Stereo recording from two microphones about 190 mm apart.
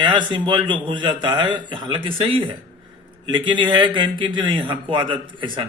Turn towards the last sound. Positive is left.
turn(degrees=-25)  # may be behind; listen again after turning